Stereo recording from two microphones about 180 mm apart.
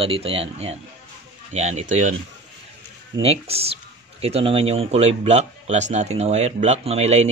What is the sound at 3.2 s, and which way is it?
A man's voice, 35° right (ahead or behind).